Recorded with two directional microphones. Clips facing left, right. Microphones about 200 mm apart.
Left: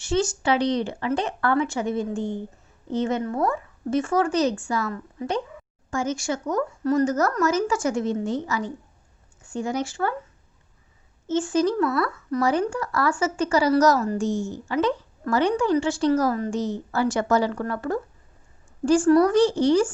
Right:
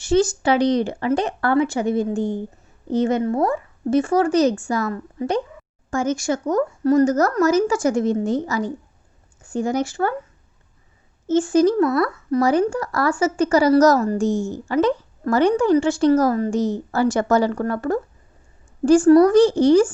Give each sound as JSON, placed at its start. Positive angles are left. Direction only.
{"t": 0.0, "sound": "speech", "side_deg": -35}
{"t": 11.3, "sound": "speech", "side_deg": -40}